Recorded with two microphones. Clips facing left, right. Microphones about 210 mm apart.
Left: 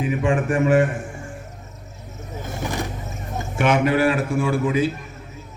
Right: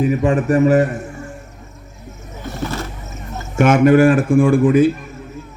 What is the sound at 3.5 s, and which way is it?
A man's voice, 45° right (ahead or behind).